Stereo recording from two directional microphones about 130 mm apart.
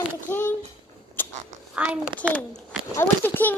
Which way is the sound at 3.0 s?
15° left (ahead or behind).